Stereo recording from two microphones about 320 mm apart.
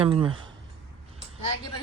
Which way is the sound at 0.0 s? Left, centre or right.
Centre.